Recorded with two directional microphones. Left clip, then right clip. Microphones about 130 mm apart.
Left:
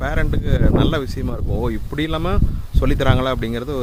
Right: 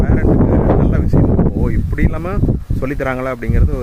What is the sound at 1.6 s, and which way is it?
Speech, 20° left (ahead or behind).